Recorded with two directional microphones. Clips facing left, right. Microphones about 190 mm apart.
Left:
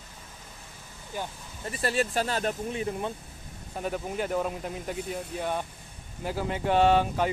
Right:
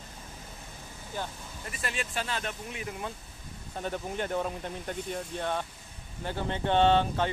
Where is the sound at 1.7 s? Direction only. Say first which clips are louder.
Left 9 dB; 35° left (ahead or behind).